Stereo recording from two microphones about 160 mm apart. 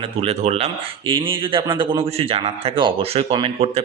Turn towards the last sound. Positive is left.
turn(degrees=-35)  # may be behind; listen again after turning